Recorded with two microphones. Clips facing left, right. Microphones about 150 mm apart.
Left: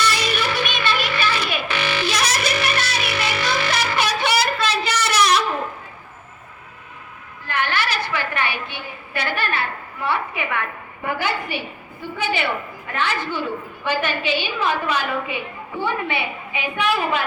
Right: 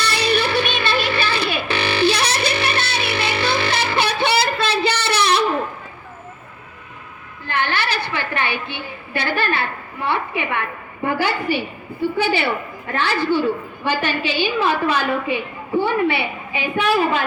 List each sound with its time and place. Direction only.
0.0 s music: 30° right (ahead or behind)
7.4 s a sound: 30° right (ahead or behind)
12.9 s a woman's voice: 35° right (ahead or behind)